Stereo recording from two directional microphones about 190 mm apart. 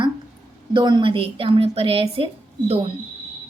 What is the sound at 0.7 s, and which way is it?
A woman's voice, 25° right (ahead or behind).